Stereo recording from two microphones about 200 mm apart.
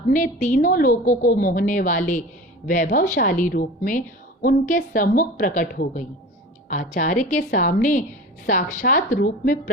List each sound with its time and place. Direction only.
0.1 s a woman's voice: 40° left (ahead or behind)